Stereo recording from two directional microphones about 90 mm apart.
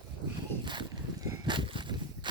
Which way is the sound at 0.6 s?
60° right (ahead or behind).